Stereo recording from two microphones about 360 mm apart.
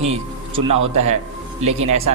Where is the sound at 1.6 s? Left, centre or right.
Centre.